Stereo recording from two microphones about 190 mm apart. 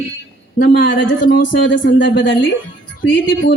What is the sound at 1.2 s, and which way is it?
Speech, 55° left (ahead or behind).